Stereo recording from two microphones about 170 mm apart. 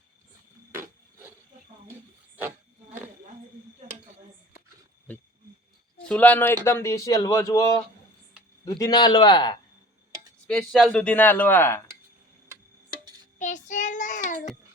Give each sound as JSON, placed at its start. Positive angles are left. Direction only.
{"t": 6.1, "sound": "speech", "side_deg": 10}
{"t": 10.4, "sound": "speech", "side_deg": 5}
{"t": 13.4, "sound": "child singing", "side_deg": 45}